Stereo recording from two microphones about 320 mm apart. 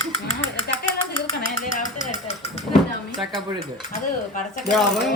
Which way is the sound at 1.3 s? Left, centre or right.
Left.